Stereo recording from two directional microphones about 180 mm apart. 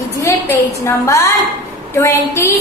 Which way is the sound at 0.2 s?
15° left (ahead or behind).